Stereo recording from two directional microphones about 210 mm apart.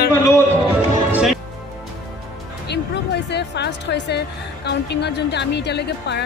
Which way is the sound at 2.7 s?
55° left (ahead or behind).